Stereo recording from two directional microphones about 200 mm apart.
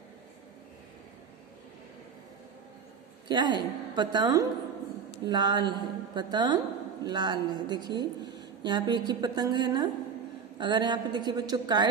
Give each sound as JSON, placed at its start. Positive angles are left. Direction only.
{"t": 3.3, "sound": "a woman's voice", "side_deg": -20}